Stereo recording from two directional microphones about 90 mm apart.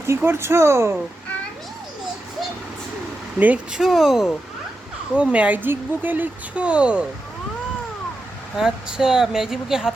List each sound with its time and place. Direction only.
0.2 s speech: 25° right (ahead or behind)
3.3 s speech: 15° right (ahead or behind)
3.8 s speech: 5° right (ahead or behind)
8.5 s speech: 5° right (ahead or behind)